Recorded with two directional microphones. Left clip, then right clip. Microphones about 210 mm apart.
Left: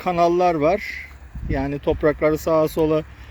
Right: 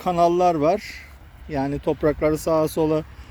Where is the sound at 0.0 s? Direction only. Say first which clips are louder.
Even; 10° right (ahead or behind).